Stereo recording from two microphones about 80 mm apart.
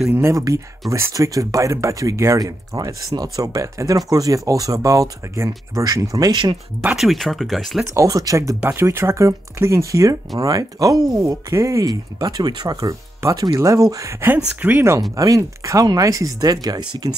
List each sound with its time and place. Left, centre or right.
0.1 s speech: right
0.4 s speech: right
2.4 s speech: right
7.0 s speech: centre
7.9 s speech: right
8.6 s speech: right
13.2 s speech: right
14.2 s speech: right
15.1 s speech: right